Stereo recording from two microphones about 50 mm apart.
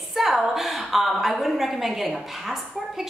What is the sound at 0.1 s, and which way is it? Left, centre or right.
A woman's voice, centre.